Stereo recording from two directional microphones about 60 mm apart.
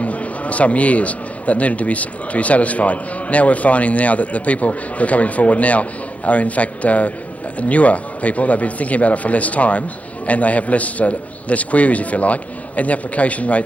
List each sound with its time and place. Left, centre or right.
0.0 s a man's voice: left